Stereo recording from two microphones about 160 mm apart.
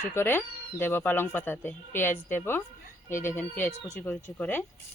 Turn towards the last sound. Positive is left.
turn(degrees=10)  # may be behind; listen again after turning